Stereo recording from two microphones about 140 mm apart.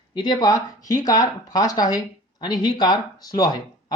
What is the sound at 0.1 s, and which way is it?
Speech, 30° left (ahead or behind).